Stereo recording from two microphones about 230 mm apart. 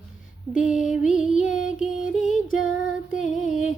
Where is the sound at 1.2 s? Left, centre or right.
Left.